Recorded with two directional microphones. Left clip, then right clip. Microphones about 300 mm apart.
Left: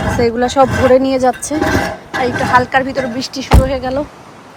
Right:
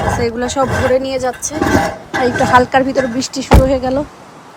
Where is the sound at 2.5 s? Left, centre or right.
Centre.